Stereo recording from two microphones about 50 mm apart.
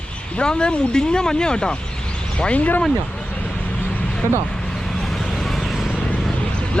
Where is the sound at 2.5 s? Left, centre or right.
Left.